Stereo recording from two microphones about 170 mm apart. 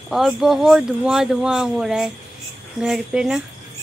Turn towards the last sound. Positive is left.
turn(degrees=-5)  # may be behind; listen again after turning